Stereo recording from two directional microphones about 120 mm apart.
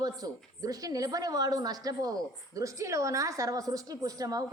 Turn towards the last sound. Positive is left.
turn(degrees=-30)  # may be behind; listen again after turning